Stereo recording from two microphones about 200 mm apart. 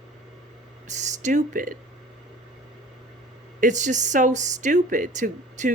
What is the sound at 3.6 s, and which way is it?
Speech, 40° right (ahead or behind).